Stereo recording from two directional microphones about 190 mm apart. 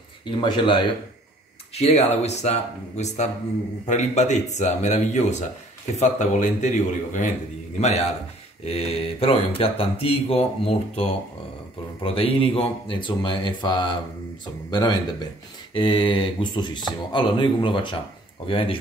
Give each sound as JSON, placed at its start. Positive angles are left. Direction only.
{"t": 0.3, "sound": "speech", "side_deg": 25}
{"t": 1.8, "sound": "speech", "side_deg": 35}